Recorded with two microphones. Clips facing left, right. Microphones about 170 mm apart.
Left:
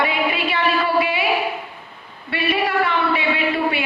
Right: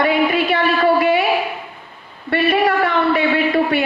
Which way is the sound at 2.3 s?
45° right (ahead or behind).